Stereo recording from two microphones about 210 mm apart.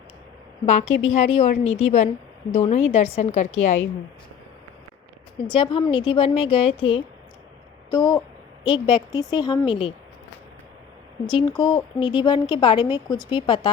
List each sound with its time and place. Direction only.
0.6 s a woman's voice: 30° left (ahead or behind)
5.5 s speech: 25° left (ahead or behind)
11.3 s speech: 20° left (ahead or behind)